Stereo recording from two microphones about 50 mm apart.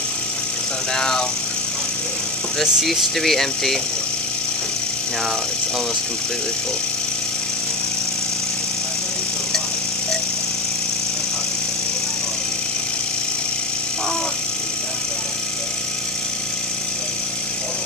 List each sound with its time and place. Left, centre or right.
0.9 s speech: centre
2.6 s speech: centre